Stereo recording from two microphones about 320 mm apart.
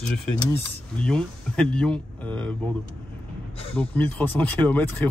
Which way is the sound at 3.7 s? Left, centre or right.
Centre.